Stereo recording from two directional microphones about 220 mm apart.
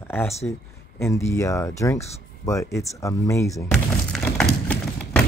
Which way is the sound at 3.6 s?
5° left (ahead or behind).